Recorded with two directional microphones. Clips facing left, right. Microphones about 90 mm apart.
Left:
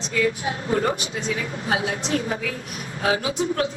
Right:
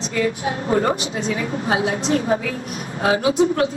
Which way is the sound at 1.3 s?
30° right (ahead or behind).